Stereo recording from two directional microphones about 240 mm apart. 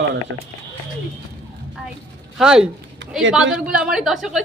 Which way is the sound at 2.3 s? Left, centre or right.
Centre.